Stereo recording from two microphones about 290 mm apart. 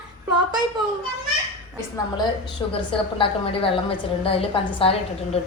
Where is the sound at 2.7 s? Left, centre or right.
Centre.